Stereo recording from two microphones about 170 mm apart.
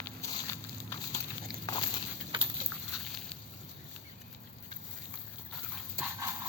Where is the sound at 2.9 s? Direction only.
Centre (ahead or behind).